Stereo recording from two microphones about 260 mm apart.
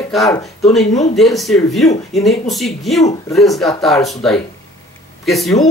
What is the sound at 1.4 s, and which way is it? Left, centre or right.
Speech, centre.